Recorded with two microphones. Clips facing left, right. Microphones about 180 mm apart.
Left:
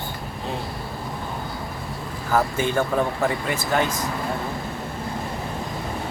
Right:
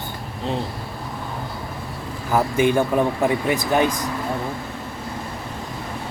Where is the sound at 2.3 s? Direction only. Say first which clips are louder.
Right 4 dB; 15° right (ahead or behind).